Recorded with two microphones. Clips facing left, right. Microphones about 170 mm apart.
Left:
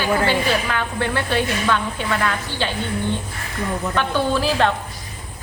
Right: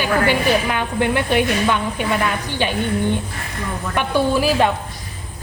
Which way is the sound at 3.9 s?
15° right (ahead or behind).